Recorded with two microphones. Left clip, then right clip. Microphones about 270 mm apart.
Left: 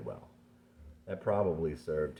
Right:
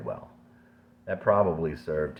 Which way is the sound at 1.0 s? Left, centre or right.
Right.